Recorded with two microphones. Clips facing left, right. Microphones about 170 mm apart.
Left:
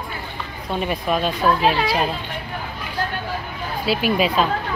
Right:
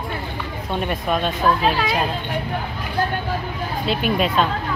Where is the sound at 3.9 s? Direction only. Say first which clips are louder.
Left 2 dB; 5° left (ahead or behind).